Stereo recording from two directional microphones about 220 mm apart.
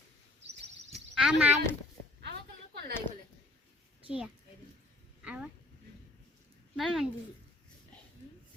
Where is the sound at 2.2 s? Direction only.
45° right (ahead or behind).